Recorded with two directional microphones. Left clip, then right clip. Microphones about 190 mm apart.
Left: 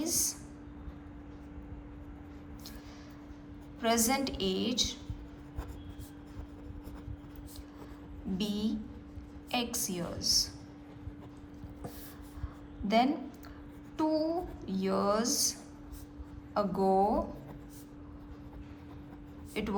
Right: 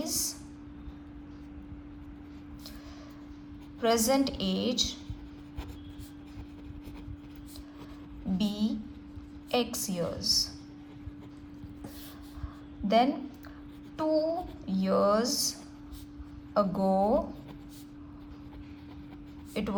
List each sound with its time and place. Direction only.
0.0 s a sound: 45° right (ahead or behind)
3.8 s a child's voice: 40° right (ahead or behind)
8.4 s a child's voice: 45° right (ahead or behind)
13.9 s a child's voice: 45° right (ahead or behind)
16.6 s a child's voice: 45° right (ahead or behind)
19.6 s a woman's voice: 40° right (ahead or behind)